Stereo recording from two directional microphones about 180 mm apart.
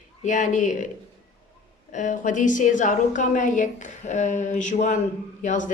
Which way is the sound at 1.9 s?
45° left (ahead or behind).